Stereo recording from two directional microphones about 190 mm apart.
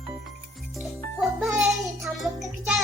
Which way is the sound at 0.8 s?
Centre (ahead or behind).